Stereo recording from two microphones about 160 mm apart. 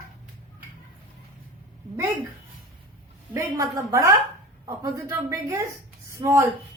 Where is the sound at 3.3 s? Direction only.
20° right (ahead or behind).